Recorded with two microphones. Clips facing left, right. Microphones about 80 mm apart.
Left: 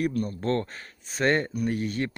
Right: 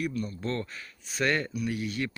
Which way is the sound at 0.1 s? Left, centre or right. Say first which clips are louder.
Left 5 dB; left.